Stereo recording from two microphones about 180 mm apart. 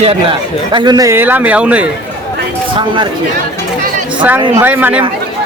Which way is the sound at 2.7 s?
25° right (ahead or behind).